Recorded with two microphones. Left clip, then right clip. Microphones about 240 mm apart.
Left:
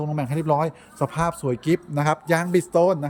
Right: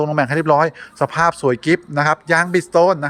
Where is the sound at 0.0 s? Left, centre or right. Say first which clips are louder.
Right 11 dB; centre.